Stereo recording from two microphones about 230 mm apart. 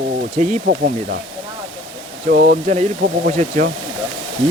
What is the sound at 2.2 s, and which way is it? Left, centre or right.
Speech, right.